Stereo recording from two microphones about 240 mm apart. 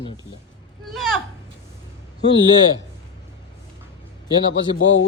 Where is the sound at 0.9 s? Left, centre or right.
Centre.